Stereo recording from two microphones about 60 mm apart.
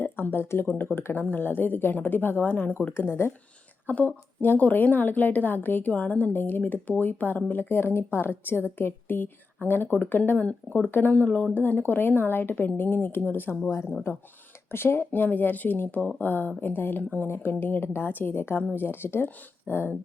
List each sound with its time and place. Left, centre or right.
0.0 s a woman's voice: left
3.8 s a woman's voice: left
10.4 s a woman's voice: centre; by 19.9 s left